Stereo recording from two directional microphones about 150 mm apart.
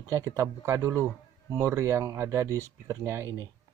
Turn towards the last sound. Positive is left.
turn(degrees=-20)  # may be behind; listen again after turning